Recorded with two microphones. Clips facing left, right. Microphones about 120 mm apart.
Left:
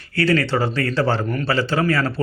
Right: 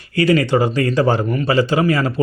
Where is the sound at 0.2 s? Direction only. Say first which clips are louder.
Right 4 dB; 15° right (ahead or behind).